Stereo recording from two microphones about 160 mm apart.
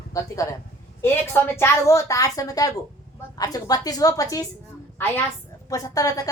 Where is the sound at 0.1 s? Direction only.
20° left (ahead or behind).